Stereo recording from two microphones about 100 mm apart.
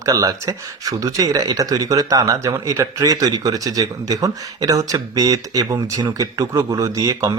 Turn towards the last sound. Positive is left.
turn(degrees=-35)  # may be behind; listen again after turning